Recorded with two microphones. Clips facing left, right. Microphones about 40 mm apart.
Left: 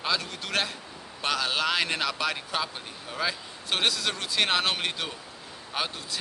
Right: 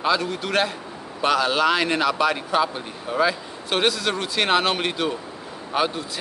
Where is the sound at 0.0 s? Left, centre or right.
Centre.